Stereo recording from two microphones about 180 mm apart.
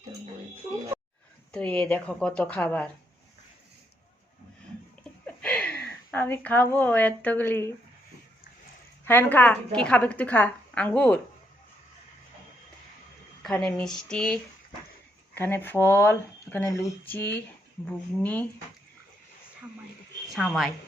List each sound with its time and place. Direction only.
1.5 s a woman's voice: 5° left (ahead or behind)
5.2 s speech: 5° left (ahead or behind)
9.0 s a woman's voice: 10° left (ahead or behind)
13.4 s speech: 5° left (ahead or behind)
15.4 s a woman's voice: 10° left (ahead or behind)
20.3 s speech: centre (ahead or behind)